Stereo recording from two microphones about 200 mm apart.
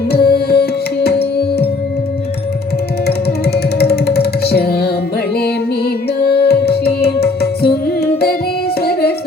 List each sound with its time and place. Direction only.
0.1 s music: 50° left (ahead or behind)
3.1 s music: 55° left (ahead or behind)